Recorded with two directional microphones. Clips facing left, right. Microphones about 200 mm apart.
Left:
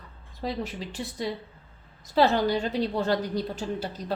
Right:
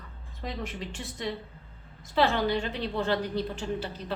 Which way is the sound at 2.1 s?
40° left (ahead or behind).